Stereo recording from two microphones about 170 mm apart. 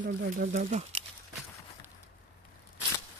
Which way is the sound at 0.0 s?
50° right (ahead or behind).